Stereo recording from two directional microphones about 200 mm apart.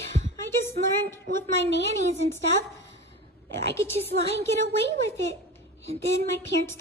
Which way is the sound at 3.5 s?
15° left (ahead or behind).